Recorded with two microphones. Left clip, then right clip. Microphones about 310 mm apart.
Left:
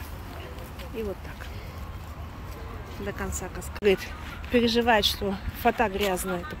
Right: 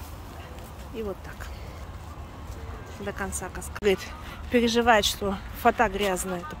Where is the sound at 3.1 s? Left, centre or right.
Centre.